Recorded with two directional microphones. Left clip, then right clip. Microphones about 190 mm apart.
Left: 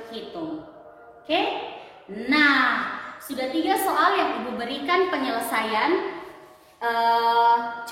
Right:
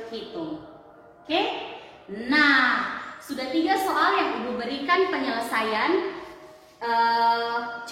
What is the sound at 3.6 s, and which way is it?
A woman's voice, 65° left (ahead or behind).